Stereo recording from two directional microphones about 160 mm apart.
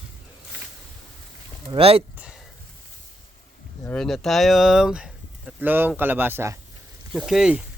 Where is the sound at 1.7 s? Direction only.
35° right (ahead or behind).